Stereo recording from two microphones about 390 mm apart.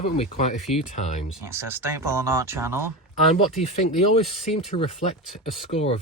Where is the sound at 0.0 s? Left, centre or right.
Centre.